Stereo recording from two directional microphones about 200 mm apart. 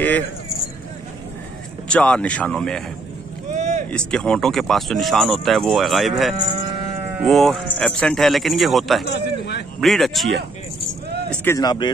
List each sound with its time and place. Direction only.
1.9 s speech: 5° left (ahead or behind)
3.5 s vehicle: 35° right (ahead or behind)
3.9 s speech: 5° left (ahead or behind)
9.0 s speech: 55° left (ahead or behind)
9.8 s keys jangling: centre (ahead or behind)
11.5 s speech: 20° left (ahead or behind)